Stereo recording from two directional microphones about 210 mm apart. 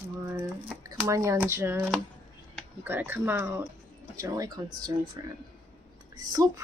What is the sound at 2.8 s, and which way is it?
Speech, 10° right (ahead or behind).